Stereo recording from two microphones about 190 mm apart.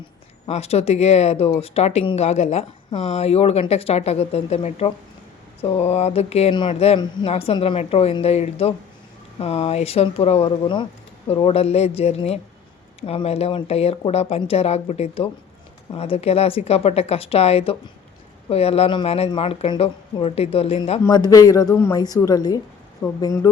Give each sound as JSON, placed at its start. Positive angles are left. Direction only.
{"t": 0.4, "sound": "speech", "side_deg": 35}
{"t": 21.0, "sound": "a woman's voice", "side_deg": 20}